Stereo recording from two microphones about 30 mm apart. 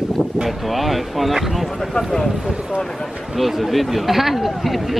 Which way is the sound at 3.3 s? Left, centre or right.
Centre.